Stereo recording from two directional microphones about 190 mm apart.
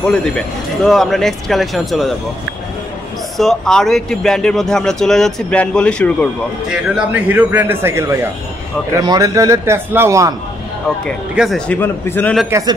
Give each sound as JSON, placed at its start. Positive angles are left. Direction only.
{"t": 0.0, "sound": "speech", "side_deg": 5}
{"t": 3.3, "sound": "speech", "side_deg": 0}
{"t": 6.7, "sound": "a man's voice", "side_deg": -5}
{"t": 11.1, "sound": "speech", "side_deg": 0}
{"t": 12.4, "sound": "a man's voice", "side_deg": -15}